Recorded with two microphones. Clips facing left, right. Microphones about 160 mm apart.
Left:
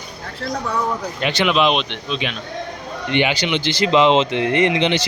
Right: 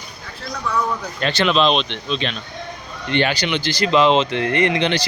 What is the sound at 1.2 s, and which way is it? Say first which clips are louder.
A man's voice: even; 15° left (ahead or behind).